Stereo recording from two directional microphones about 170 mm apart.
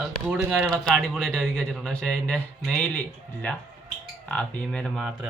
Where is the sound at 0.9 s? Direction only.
Centre (ahead or behind).